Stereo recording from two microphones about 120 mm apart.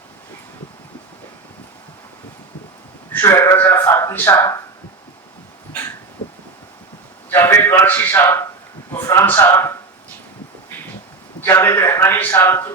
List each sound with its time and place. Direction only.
3.1 s a man's voice: 20° left (ahead or behind)
7.3 s a man's voice: 20° left (ahead or behind)
11.3 s a man's voice: 20° left (ahead or behind)